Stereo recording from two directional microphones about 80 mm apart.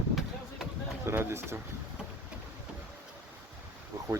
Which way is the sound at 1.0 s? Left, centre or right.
Right.